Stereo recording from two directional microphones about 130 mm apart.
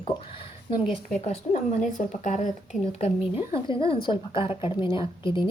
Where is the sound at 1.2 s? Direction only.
60° left (ahead or behind).